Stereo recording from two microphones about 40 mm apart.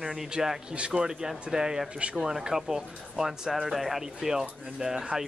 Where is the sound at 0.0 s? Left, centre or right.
Centre.